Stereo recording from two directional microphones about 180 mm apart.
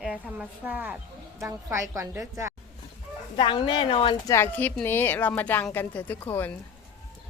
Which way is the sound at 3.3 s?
30° left (ahead or behind).